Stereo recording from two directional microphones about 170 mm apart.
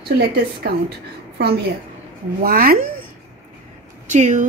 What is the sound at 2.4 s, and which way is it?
Speech, 60° right (ahead or behind).